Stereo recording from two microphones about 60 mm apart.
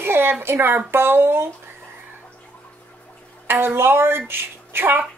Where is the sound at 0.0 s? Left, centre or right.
Right.